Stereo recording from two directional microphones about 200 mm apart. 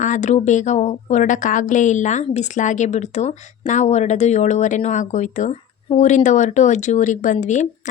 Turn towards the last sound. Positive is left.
turn(degrees=35)  # may be behind; listen again after turning